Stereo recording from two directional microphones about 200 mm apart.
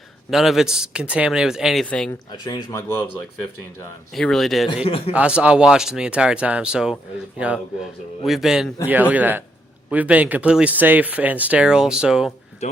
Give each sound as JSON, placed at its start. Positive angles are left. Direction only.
{"t": 0.3, "sound": "a man's voice", "side_deg": 0}
{"t": 2.3, "sound": "speech", "side_deg": 20}
{"t": 4.1, "sound": "a man's voice", "side_deg": 0}